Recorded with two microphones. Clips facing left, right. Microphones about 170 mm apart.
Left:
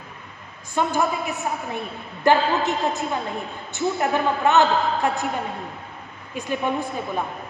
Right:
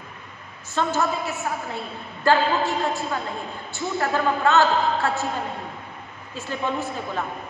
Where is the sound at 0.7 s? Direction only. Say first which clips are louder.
Left 1 dB; 15° left (ahead or behind).